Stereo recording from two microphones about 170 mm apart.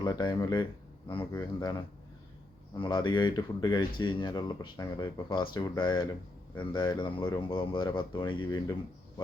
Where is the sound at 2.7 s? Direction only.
30° left (ahead or behind).